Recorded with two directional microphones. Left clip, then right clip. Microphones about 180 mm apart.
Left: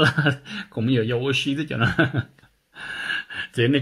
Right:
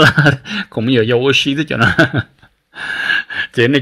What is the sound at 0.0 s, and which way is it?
Speech, 20° right (ahead or behind).